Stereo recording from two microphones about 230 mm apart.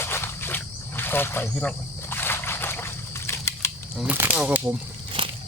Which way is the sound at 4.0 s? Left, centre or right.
Centre.